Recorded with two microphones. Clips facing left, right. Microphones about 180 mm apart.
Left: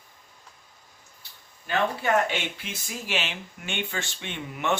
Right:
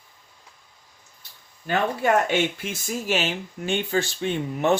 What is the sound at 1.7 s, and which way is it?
Speech, 45° right (ahead or behind).